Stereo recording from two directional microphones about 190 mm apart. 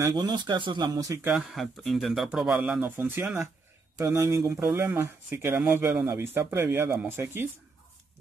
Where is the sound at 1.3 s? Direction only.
5° right (ahead or behind).